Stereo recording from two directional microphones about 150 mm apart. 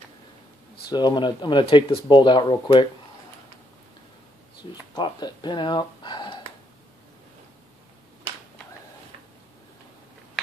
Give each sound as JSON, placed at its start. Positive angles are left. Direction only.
{"t": 0.9, "sound": "speech", "side_deg": 30}
{"t": 4.9, "sound": "speech", "side_deg": 30}